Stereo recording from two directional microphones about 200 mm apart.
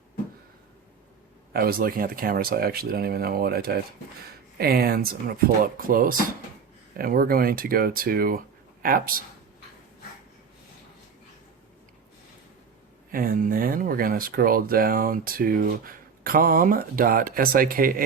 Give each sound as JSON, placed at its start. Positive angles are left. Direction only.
{"t": 1.5, "sound": "speech", "side_deg": -45}
{"t": 13.1, "sound": "speech", "side_deg": -45}